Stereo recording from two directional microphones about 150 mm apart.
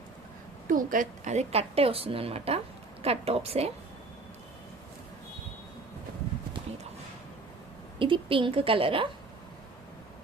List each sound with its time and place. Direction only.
0.7 s a woman's voice: 60° right (ahead or behind); by 3.7 s 40° right (ahead or behind)
7.9 s a woman's voice: 35° right (ahead or behind)